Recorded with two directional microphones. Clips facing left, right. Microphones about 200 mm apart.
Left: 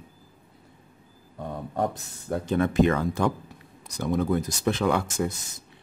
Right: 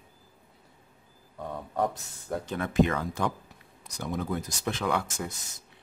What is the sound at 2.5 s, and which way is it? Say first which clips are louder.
Speech: left 4 dB; 35° left (ahead or behind).